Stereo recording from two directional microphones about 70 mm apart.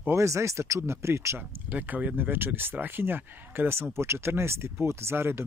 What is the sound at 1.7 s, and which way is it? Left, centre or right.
Speech, right.